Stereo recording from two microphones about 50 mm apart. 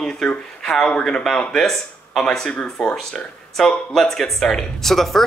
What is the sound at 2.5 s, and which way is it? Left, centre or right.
Speech, left.